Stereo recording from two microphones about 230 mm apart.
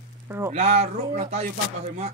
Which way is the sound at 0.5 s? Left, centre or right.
Right.